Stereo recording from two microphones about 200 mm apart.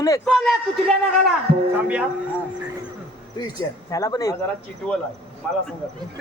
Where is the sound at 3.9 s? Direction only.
15° left (ahead or behind).